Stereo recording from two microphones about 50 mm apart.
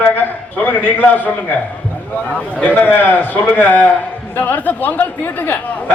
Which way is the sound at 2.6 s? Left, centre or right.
Left.